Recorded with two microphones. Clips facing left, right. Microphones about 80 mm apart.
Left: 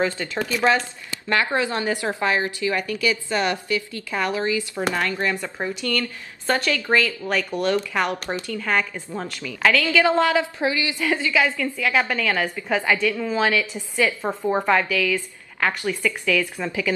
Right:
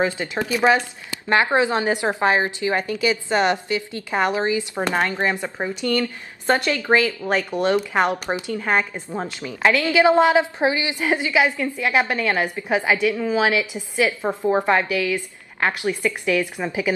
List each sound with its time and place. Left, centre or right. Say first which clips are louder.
0.0 s speech: right 1 dB; centre